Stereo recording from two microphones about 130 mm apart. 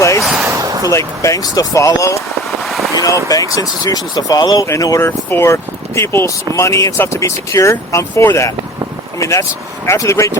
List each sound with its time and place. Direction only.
0.2 s speech: centre (ahead or behind)
0.4 s a sound: 25° right (ahead or behind)
0.9 s speech: 25° left (ahead or behind)
2.6 s vehicle: centre (ahead or behind)
2.9 s a sound: 25° left (ahead or behind)
3.2 s speech: 25° left (ahead or behind)